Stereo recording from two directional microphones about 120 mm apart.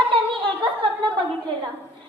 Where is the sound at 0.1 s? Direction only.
45° right (ahead or behind).